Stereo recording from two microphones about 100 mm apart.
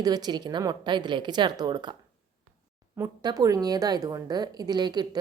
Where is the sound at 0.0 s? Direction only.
45° right (ahead or behind).